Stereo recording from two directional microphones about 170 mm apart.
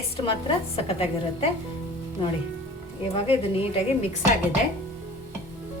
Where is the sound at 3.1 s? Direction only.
35° left (ahead or behind).